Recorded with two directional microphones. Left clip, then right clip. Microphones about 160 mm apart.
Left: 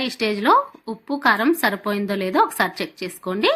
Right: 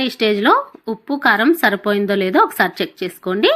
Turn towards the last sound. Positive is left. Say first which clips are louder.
# right 4 dB
turn(degrees=-15)  # may be behind; listen again after turning